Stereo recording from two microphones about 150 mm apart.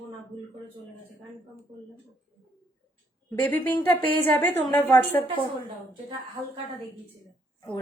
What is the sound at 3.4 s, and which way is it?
A woman's voice, 10° left (ahead or behind).